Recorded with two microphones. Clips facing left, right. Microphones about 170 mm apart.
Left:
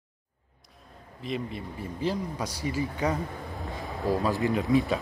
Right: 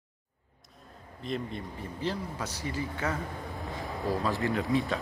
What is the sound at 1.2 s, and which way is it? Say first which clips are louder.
Speech: left 2 dB; 5° left (ahead or behind).